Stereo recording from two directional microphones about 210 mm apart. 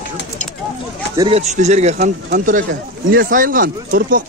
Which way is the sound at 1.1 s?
20° right (ahead or behind).